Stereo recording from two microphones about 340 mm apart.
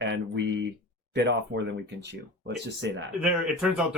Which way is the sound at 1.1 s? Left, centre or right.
Right.